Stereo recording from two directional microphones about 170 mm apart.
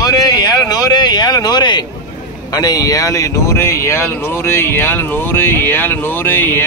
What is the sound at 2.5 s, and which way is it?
Speech, 20° left (ahead or behind).